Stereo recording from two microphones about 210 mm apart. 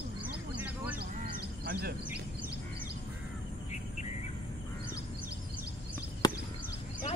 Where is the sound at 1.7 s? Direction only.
45° right (ahead or behind).